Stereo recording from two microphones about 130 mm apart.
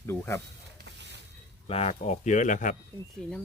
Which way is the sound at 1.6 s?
50° left (ahead or behind).